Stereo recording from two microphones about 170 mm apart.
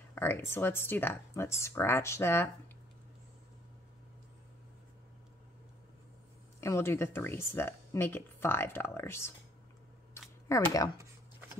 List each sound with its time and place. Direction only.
0.1 s speech: 10° left (ahead or behind)
6.6 s speech: 15° left (ahead or behind)
10.5 s speech: 20° left (ahead or behind)